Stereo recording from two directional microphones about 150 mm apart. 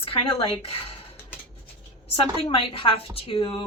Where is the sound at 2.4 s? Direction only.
40° left (ahead or behind).